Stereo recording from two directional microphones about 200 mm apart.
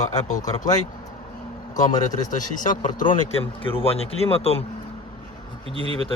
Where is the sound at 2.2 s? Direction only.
40° left (ahead or behind).